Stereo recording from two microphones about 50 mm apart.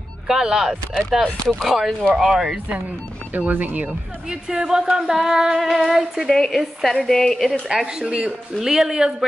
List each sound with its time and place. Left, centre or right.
0.3 s female singing: centre
1.1 s speech: centre
1.6 s female singing: centre
3.3 s speech: right
4.3 s female singing: centre
6.3 s a woman's voice: centre
7.6 s female singing: centre
8.0 s female singing: centre
8.3 s female singing: centre